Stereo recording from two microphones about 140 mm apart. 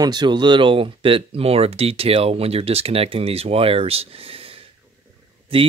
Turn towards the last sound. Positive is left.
turn(degrees=-40)  # may be behind; listen again after turning